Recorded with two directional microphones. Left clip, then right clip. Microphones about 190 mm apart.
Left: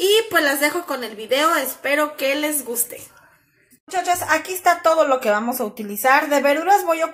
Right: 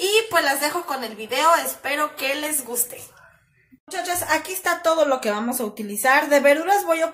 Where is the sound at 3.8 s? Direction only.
10° left (ahead or behind).